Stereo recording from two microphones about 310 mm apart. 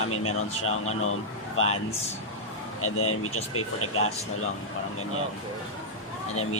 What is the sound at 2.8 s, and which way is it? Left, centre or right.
Speech, left.